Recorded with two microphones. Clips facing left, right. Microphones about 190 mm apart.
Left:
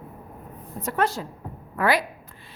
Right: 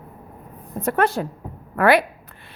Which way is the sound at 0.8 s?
60° right (ahead or behind).